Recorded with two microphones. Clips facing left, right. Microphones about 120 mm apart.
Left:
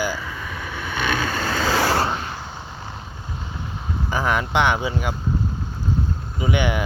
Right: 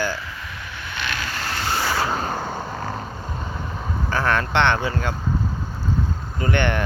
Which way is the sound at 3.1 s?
55° right (ahead or behind).